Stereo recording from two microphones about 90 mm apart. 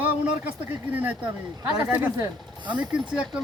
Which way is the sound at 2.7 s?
15° right (ahead or behind).